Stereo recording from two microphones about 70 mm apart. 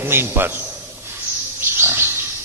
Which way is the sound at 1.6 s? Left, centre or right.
Right.